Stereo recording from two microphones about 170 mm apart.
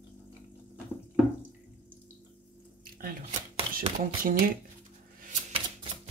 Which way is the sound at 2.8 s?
60° right (ahead or behind).